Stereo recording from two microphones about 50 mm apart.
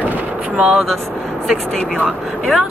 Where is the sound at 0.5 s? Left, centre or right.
Right.